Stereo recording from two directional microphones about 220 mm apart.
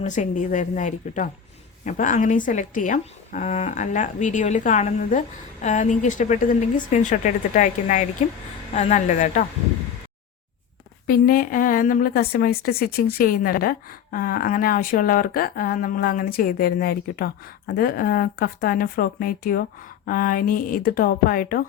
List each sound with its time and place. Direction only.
0.0 s a woman's voice: 35° left (ahead or behind)
11.0 s a woman's voice: 40° left (ahead or behind)